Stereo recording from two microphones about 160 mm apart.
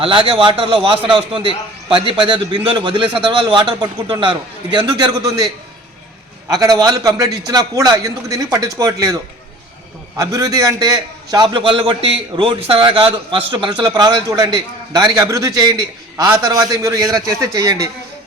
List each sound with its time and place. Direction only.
0.0 s a man's voice: 35° right (ahead or behind)
6.5 s a man's voice: 25° right (ahead or behind)
10.2 s a man's voice: 25° right (ahead or behind)